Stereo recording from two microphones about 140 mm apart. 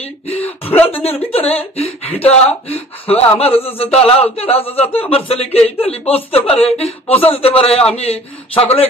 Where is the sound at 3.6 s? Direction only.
45° left (ahead or behind).